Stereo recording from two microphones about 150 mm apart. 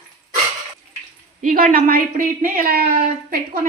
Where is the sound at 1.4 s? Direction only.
65° right (ahead or behind).